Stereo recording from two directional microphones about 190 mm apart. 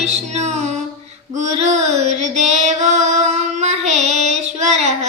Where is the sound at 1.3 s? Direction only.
40° right (ahead or behind).